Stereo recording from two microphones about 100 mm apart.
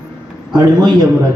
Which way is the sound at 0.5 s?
45° right (ahead or behind).